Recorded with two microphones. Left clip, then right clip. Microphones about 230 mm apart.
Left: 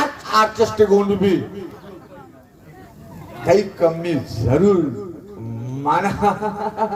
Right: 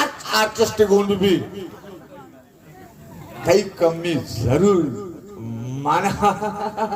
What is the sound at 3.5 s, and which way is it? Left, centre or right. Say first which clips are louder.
A man's voice: left 1 dB; right.